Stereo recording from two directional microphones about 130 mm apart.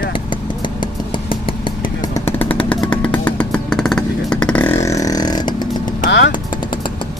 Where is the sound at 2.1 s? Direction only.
15° left (ahead or behind).